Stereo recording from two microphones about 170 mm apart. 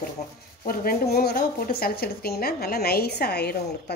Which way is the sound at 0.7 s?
60° left (ahead or behind).